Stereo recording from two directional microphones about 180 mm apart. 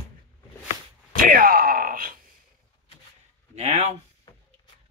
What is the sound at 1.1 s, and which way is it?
Speech, 50° right (ahead or behind).